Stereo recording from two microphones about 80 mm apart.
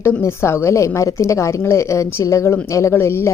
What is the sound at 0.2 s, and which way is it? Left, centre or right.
A woman's voice, left.